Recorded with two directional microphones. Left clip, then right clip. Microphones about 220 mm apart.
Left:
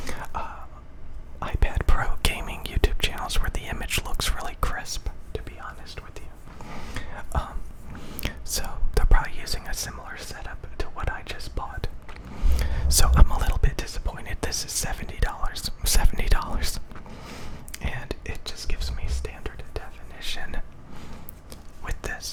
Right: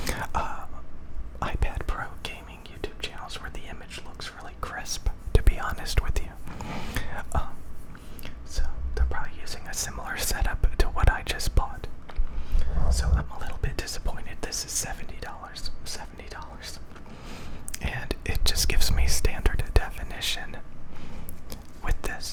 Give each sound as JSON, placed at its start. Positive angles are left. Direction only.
{"t": 0.0, "sound": "whispering", "side_deg": -10}
{"t": 1.5, "sound": "whispering", "side_deg": 10}
{"t": 3.8, "sound": "whispering", "side_deg": 30}
{"t": 4.7, "sound": "whispering", "side_deg": 5}
{"t": 5.3, "sound": "whispering", "side_deg": -15}
{"t": 8.0, "sound": "whispering", "side_deg": 30}
{"t": 10.0, "sound": "whispering", "side_deg": -10}
{"t": 12.5, "sound": "whispering", "side_deg": 30}
{"t": 13.4, "sound": "whispering", "side_deg": 15}
{"t": 17.3, "sound": "whispering", "side_deg": 5}
{"t": 21.5, "sound": "a sound", "side_deg": -5}